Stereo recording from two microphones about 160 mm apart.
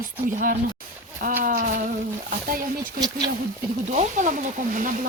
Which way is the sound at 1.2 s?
60° right (ahead or behind).